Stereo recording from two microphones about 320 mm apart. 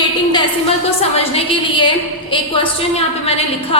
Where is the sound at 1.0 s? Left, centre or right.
Centre.